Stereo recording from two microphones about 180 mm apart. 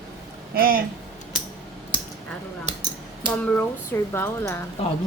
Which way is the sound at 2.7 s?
40° right (ahead or behind).